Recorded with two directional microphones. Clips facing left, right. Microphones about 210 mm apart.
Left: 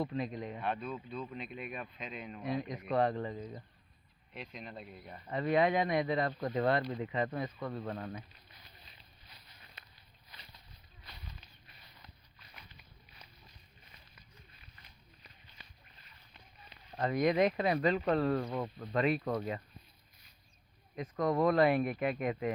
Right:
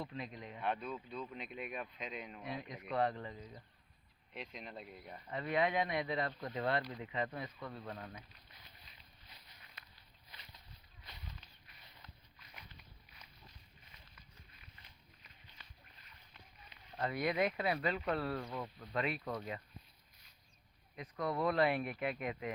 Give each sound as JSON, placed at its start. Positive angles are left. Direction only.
{"t": 0.0, "sound": "speech", "side_deg": 45}
{"t": 0.6, "sound": "speech", "side_deg": -15}
{"t": 2.4, "sound": "speech", "side_deg": 40}
{"t": 4.4, "sound": "speech", "side_deg": -20}
{"t": 5.3, "sound": "speech", "side_deg": 40}
{"t": 15.6, "sound": "boat", "side_deg": 15}
{"t": 16.6, "sound": "speech", "side_deg": 40}
{"t": 20.9, "sound": "speech", "side_deg": 45}